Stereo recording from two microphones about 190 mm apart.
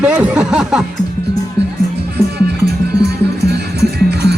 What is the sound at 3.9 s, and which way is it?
Music, 60° right (ahead or behind).